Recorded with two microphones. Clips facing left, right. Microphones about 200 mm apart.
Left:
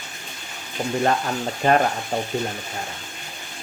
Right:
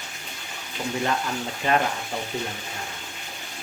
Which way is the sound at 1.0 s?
45° left (ahead or behind).